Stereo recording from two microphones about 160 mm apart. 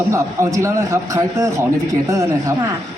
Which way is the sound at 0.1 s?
20° right (ahead or behind).